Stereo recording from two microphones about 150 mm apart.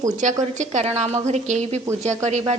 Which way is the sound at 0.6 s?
50° right (ahead or behind).